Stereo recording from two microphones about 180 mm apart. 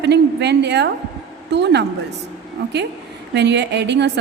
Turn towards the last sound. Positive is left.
turn(degrees=-70)  # may be behind; listen again after turning